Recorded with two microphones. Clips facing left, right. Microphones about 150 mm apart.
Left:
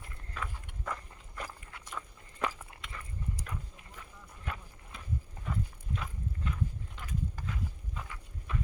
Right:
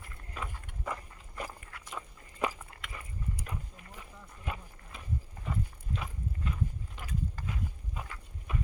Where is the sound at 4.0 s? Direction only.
10° right (ahead or behind).